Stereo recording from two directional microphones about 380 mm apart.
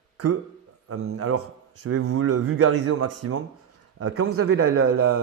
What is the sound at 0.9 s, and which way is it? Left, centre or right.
A man's voice, right.